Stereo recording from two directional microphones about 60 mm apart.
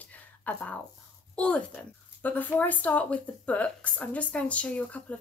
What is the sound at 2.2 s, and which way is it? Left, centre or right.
Speech, left.